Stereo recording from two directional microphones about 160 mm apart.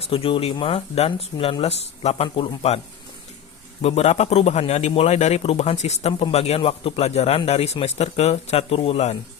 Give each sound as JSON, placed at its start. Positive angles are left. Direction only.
{"t": 0.0, "sound": "a man's voice", "side_deg": 35}